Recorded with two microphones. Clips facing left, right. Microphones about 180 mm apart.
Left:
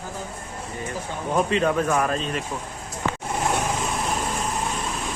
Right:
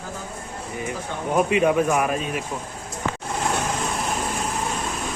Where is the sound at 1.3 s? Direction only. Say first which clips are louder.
Right 3 dB; 10° right (ahead or behind).